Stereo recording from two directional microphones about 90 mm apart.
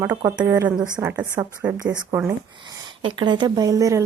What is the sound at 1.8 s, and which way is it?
Speech, 50° right (ahead or behind).